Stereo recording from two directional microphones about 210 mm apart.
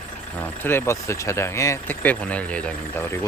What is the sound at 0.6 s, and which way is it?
Speech, 10° left (ahead or behind).